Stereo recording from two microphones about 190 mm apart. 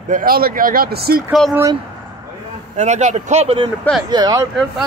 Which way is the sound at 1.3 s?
Centre (ahead or behind).